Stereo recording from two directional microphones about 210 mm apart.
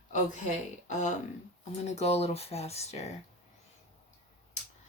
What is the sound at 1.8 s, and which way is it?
Speech, 30° left (ahead or behind).